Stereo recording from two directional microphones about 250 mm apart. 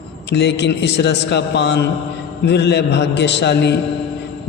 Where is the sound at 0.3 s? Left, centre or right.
Left.